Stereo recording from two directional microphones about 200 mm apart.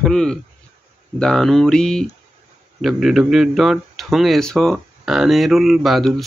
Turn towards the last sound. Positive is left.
turn(degrees=0)  # may be behind; listen again after turning